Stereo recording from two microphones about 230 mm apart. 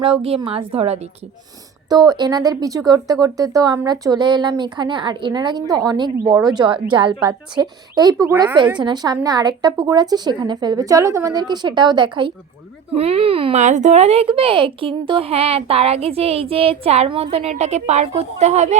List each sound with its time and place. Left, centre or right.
0.0 s speech: right